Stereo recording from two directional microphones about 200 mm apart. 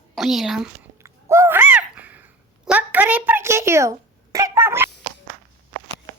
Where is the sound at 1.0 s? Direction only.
15° right (ahead or behind).